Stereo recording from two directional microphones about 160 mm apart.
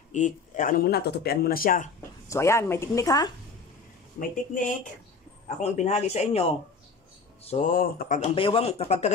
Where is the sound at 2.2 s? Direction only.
15° left (ahead or behind).